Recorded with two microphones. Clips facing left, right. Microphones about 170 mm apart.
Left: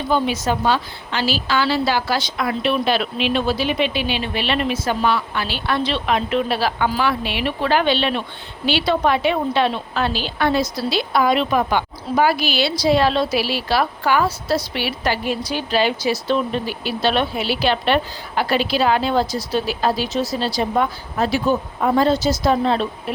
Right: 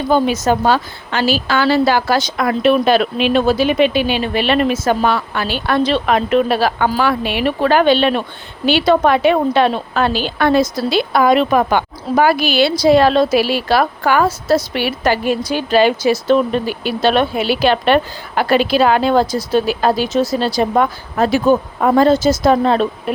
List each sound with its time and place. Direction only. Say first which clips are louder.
0.1 s a woman's voice: right 5 dB; 45° right (ahead or behind)